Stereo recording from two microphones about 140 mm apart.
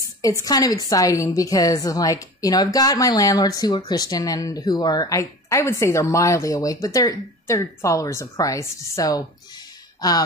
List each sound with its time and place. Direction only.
0.2 s a woman's voice: 25° left (ahead or behind)